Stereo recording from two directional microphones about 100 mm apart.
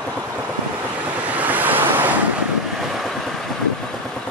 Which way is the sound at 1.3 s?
15° right (ahead or behind).